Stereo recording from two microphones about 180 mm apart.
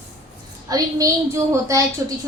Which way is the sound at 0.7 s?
20° right (ahead or behind).